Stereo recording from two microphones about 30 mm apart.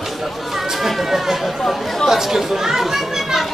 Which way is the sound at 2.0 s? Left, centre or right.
Centre.